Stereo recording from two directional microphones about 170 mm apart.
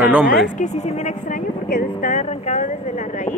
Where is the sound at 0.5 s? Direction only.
45° left (ahead or behind).